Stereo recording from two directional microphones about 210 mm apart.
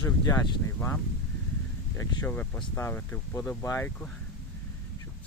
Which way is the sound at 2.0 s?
10° left (ahead or behind).